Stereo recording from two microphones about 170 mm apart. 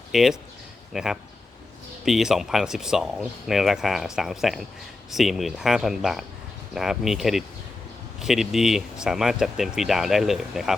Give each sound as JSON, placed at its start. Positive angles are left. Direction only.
{"t": 0.1, "sound": "speech", "side_deg": 0}